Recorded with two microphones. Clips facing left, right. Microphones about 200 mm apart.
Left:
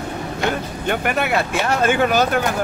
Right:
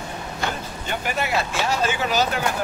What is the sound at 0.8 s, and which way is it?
Speech, 60° left (ahead or behind).